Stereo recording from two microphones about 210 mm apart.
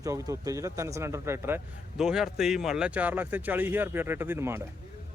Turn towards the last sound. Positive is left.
turn(degrees=-10)  # may be behind; listen again after turning